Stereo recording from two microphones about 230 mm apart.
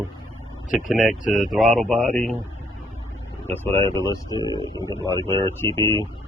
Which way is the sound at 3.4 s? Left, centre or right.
Centre.